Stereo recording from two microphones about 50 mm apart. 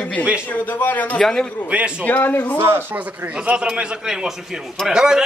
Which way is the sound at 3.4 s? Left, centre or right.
Right.